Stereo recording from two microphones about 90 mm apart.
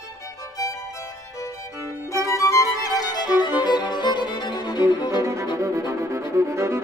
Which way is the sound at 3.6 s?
50° left (ahead or behind).